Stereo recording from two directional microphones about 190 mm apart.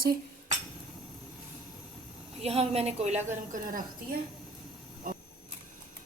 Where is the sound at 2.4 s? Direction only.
35° right (ahead or behind).